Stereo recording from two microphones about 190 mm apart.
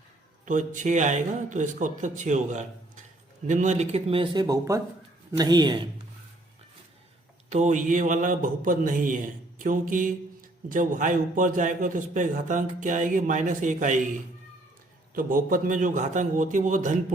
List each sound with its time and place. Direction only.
0.4 s a man's voice: 40° right (ahead or behind); by 5.9 s 25° right (ahead or behind)
7.5 s a man's voice: 40° right (ahead or behind)
15.1 s a man's voice: 45° right (ahead or behind)